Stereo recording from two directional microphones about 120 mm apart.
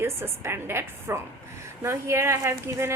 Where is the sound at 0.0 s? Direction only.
20° right (ahead or behind).